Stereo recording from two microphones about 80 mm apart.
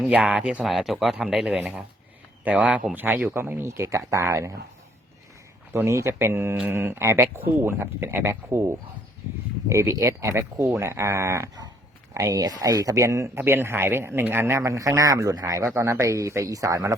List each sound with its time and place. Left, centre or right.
0.0 s speech: centre
2.4 s a man's voice: centre; by 4.5 s right
5.7 s a man's voice: right
12.1 s a man's voice: right